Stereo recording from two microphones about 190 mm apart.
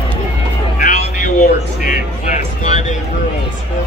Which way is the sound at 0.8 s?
45° left (ahead or behind).